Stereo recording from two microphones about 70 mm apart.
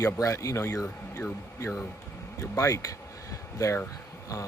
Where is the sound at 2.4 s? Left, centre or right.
Left.